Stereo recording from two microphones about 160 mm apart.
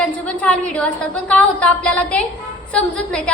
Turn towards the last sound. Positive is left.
turn(degrees=5)  # may be behind; listen again after turning